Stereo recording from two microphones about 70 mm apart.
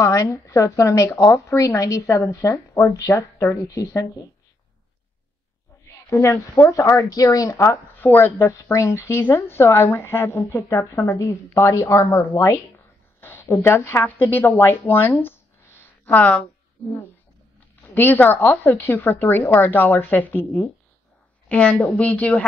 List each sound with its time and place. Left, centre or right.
0.1 s speech: left
5.9 s a woman's voice: left
7.9 s speech: left
12.7 s a sound: left
14.0 s speech: left
16.2 s a woman's voice: centre
17.9 s a woman's voice: left